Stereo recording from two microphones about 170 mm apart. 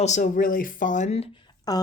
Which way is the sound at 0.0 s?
45° left (ahead or behind).